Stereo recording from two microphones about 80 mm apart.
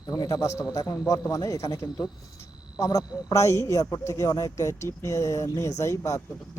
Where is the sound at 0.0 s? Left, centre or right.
Left.